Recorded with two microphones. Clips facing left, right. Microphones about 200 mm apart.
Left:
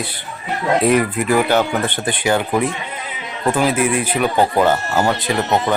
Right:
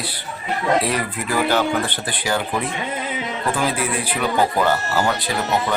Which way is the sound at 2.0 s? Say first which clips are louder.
Left 5 dB; 20° left (ahead or behind).